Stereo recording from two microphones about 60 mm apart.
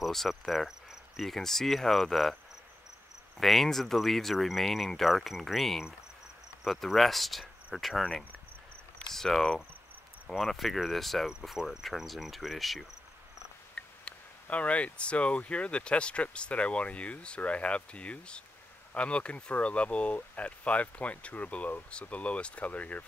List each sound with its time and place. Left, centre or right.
0.0 s cricket: centre
3.3 s speech: centre
9.1 s cricket: centre
10.2 s speech: centre
13.7 s speech: centre